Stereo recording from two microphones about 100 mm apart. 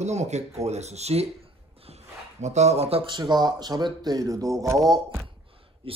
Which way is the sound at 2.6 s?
90° right.